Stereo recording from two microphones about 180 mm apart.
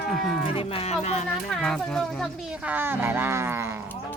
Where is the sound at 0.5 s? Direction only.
35° left (ahead or behind).